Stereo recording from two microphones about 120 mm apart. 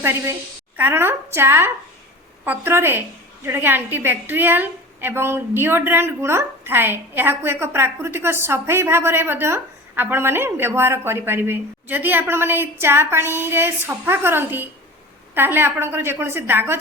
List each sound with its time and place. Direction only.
0.0 s a woman's voice: 20° right (ahead or behind)